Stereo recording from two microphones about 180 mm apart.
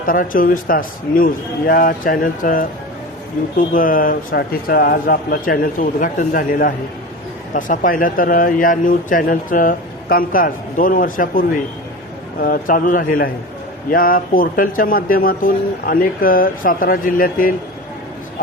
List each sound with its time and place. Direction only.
0.0 s speech: 50° left (ahead or behind)
3.7 s speech: 50° left (ahead or behind)